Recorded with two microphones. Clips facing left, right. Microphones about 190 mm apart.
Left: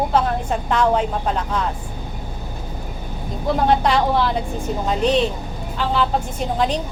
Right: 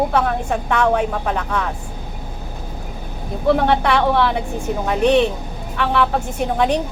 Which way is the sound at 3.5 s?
65° right (ahead or behind).